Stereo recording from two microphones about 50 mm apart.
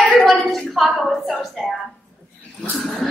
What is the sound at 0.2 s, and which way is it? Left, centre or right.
Music, centre.